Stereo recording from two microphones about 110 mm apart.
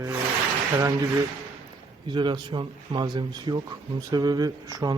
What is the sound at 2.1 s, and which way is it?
Speech, 45° right (ahead or behind).